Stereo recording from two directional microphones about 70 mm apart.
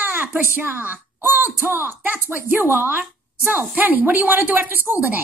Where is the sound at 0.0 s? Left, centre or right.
Right.